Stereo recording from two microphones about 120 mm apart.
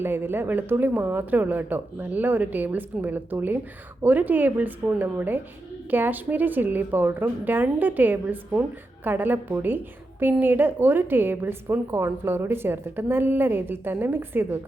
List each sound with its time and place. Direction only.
0.0 s a woman's voice: 20° right (ahead or behind)